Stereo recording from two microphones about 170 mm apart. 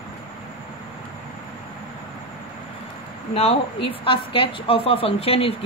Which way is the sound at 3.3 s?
35° left (ahead or behind).